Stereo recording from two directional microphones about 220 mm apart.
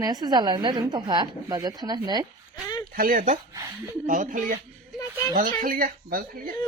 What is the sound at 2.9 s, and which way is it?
A woman's voice, 40° right (ahead or behind).